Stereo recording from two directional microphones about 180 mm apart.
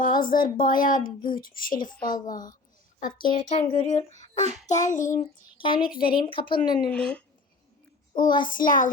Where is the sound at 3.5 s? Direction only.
30° left (ahead or behind).